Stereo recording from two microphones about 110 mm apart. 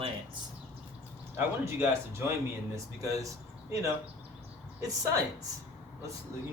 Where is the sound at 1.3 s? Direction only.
20° right (ahead or behind).